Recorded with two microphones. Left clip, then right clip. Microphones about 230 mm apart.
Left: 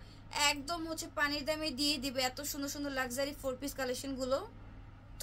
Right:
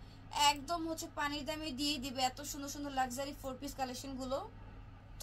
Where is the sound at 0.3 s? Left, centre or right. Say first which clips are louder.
Right 1 dB; left.